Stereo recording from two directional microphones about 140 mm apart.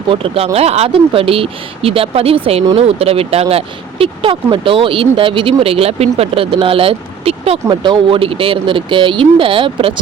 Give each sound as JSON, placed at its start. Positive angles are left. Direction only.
{"t": 0.1, "sound": "speech", "side_deg": -40}
{"t": 7.7, "sound": "speech", "side_deg": -35}